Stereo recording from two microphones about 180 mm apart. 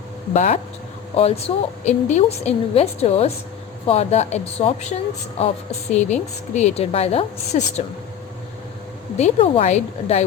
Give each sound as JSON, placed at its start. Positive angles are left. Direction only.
{"t": 0.3, "sound": "a woman's voice", "side_deg": 35}
{"t": 9.1, "sound": "a woman's voice", "side_deg": 35}